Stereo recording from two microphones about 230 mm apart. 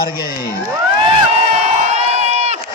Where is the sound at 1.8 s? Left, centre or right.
Right.